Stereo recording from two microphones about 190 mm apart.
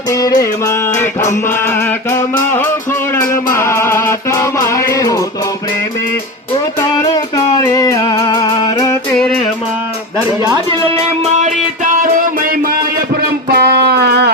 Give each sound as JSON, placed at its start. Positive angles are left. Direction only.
{"t": 0.1, "sound": "music", "side_deg": 20}
{"t": 7.0, "sound": "music", "side_deg": 20}
{"t": 9.1, "sound": "music", "side_deg": 5}
{"t": 10.2, "sound": "speech", "side_deg": -20}
{"t": 11.3, "sound": "music", "side_deg": -40}
{"t": 13.5, "sound": "music", "side_deg": -55}